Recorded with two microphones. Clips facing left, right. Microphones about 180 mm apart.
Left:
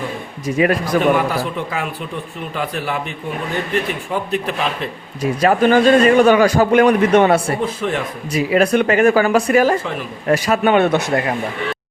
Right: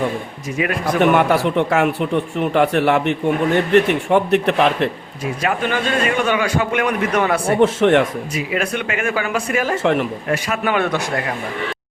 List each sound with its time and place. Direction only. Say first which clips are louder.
0.4 s a man's voice: left 6 dB; 35° left (ahead or behind)
1.1 s speech: right 3 dB; 70° right (ahead or behind)
5.2 s a man's voice: left 7 dB; 40° left (ahead or behind)
7.6 s speech: right 8 dB; 75° right (ahead or behind)
8.3 s a man's voice: left 7 dB; 35° left (ahead or behind)
9.8 s speech: right 8 dB; 70° right (ahead or behind)
10.2 s a man's voice: left 5 dB; 40° left (ahead or behind)